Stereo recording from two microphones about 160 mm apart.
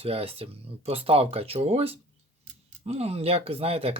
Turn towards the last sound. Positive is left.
turn(degrees=-40)  # may be behind; listen again after turning